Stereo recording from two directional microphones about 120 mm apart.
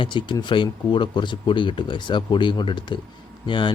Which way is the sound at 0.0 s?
40° left (ahead or behind).